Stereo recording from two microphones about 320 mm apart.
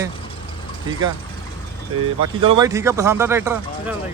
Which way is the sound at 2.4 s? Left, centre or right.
Centre.